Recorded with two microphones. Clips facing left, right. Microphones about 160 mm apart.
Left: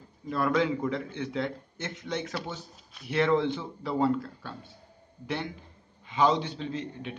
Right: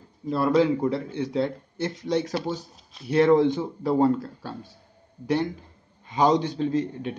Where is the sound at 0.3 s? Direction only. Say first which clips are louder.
Right 6 dB; 30° right (ahead or behind).